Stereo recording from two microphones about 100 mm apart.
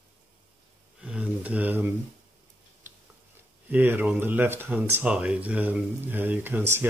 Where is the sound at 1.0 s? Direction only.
10° right (ahead or behind).